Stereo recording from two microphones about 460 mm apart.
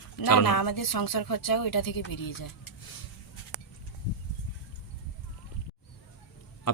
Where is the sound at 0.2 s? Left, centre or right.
Left.